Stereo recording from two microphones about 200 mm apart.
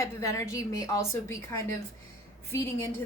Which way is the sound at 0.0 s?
15° left (ahead or behind).